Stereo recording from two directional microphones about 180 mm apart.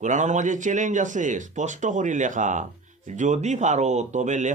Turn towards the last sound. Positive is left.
turn(degrees=-45)  # may be behind; listen again after turning